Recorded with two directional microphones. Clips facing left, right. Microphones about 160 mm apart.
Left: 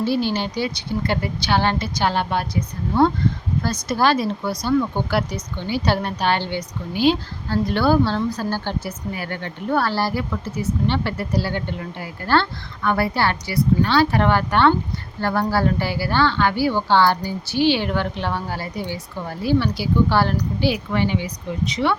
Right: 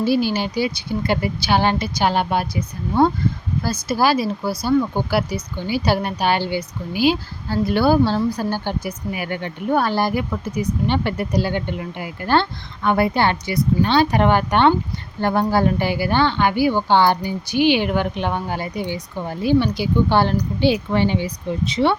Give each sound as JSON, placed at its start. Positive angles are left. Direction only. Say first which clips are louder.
{"t": 0.0, "sound": "a woman's voice", "louder": "right 2 dB", "side_deg": -10}